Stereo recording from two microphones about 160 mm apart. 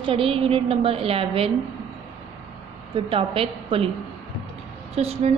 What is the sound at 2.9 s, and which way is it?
Speech, 35° right (ahead or behind).